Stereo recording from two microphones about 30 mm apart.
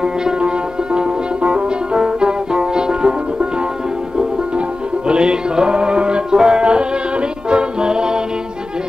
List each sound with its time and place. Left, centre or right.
0.0 s music: right
6.6 s music: right